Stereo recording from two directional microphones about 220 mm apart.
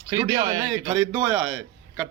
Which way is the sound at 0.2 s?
15° right (ahead or behind).